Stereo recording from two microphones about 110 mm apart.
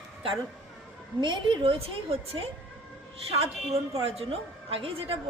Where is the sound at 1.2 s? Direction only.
45° right (ahead or behind).